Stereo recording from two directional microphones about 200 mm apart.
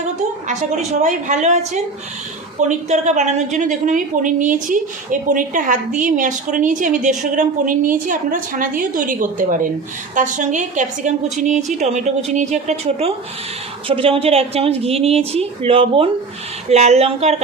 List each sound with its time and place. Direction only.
0.4 s a woman's voice: 35° right (ahead or behind)